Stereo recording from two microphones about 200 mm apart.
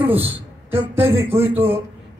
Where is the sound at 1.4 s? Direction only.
10° right (ahead or behind).